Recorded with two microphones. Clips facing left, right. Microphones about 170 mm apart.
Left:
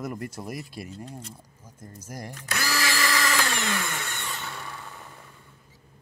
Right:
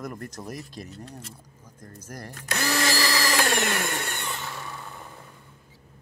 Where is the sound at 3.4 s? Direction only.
55° right (ahead or behind).